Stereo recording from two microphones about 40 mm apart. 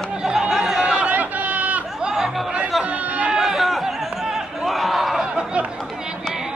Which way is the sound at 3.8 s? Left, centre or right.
Centre.